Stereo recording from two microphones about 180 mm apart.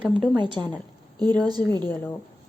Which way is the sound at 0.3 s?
25° right (ahead or behind).